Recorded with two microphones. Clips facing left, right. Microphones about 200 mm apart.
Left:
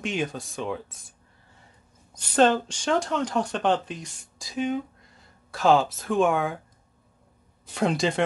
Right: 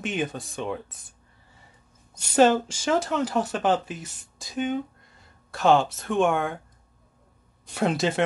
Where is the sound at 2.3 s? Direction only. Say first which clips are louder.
Right 2 dB; 5° right (ahead or behind).